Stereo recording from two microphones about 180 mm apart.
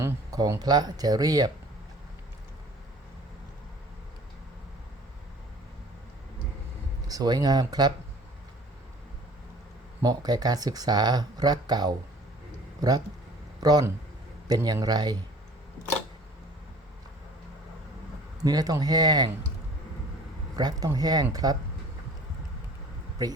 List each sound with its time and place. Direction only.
0.0 s speech: 20° right (ahead or behind)
7.1 s speech: 20° right (ahead or behind)
10.0 s speech: 20° right (ahead or behind)
13.6 s speech: 20° right (ahead or behind)
18.4 s speech: 20° right (ahead or behind)
20.6 s speech: 20° right (ahead or behind)
23.2 s speech: 20° right (ahead or behind)